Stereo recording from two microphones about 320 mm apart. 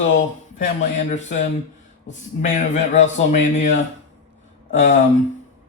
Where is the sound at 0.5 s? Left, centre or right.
Left.